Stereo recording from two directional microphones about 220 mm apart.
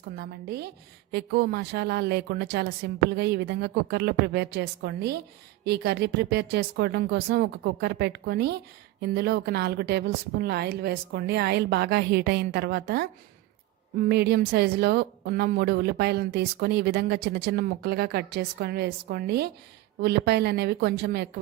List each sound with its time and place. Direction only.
0.2 s a woman's voice: 45° right (ahead or behind)
14.1 s a woman's voice: 50° right (ahead or behind)